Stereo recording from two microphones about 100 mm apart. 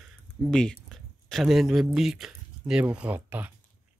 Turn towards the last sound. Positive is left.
turn(degrees=-15)  # may be behind; listen again after turning